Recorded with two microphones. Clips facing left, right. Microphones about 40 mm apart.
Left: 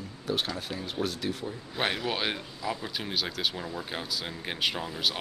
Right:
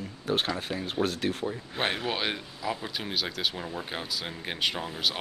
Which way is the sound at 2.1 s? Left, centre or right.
Centre.